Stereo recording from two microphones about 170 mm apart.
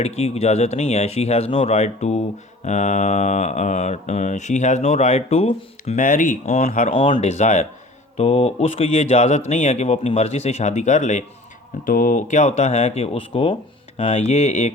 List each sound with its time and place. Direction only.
0.0 s speech: 35° left (ahead or behind)
2.6 s mantra: 45° left (ahead or behind)
6.9 s speech: 35° left (ahead or behind)